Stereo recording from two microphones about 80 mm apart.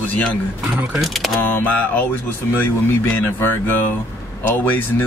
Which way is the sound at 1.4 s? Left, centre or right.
Left.